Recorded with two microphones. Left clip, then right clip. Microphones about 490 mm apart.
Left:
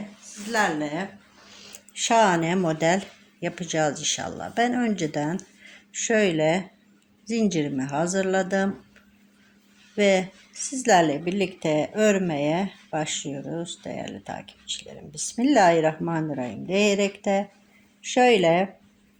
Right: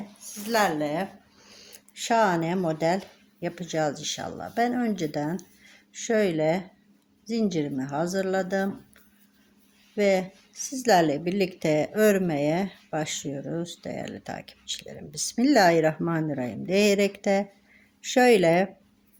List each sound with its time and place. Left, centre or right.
0.5 s speech: right
1.7 s speech: right
9.9 s a woman's voice: right